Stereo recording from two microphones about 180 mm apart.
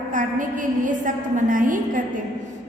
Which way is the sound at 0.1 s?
45° right (ahead or behind).